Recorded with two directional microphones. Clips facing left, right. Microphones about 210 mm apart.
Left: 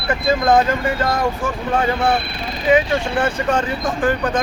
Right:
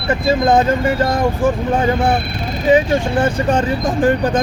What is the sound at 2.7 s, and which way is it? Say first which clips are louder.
Speech: right 3 dB; 30° right (ahead or behind).